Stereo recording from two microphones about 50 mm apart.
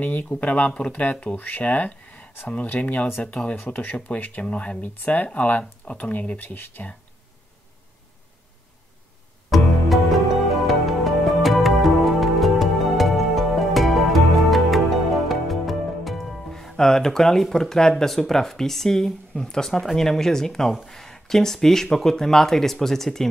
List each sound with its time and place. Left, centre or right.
0.0 s speech: left
4.5 s speech: left
4.8 s speech: left
9.5 s music: centre
15.2 s speech: centre